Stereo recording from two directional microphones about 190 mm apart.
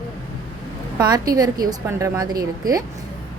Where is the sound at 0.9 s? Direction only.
20° right (ahead or behind).